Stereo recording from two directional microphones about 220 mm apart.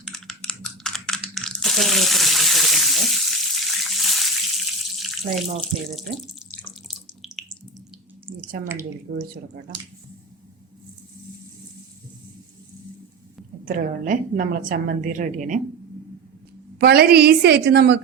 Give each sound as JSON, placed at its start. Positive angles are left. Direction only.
{"t": 0.0, "sound": "computer keyboard", "side_deg": 0}
{"t": 6.5, "sound": "water", "side_deg": 0}
{"t": 8.6, "sound": "speech", "side_deg": -10}
{"t": 13.7, "sound": "a woman's voice", "side_deg": -40}
{"t": 16.7, "sound": "a woman's voice", "side_deg": -45}